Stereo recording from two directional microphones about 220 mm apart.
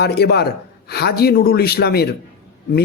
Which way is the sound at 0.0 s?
45° left (ahead or behind).